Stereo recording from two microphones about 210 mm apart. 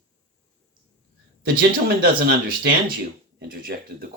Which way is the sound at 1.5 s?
45° right (ahead or behind).